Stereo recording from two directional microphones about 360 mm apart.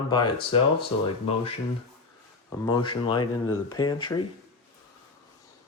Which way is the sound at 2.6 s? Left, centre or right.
Centre.